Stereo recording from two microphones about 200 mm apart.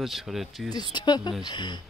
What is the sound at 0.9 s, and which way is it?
Speech, 20° left (ahead or behind).